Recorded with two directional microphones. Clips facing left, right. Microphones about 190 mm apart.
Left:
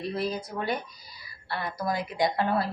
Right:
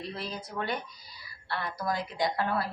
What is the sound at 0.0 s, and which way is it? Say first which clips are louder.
A woman's voice: left 7 dB; 15° left (ahead or behind).